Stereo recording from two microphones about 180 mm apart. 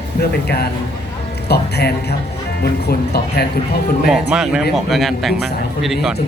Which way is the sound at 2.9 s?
60° left (ahead or behind).